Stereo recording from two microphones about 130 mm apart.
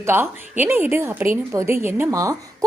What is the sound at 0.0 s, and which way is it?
A woman's voice, 15° right (ahead or behind).